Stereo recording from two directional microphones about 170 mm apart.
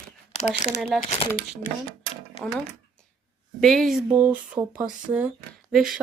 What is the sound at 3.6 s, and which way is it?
Speech, centre (ahead or behind).